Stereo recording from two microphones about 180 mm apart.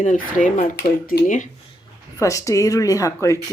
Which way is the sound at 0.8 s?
55° left (ahead or behind).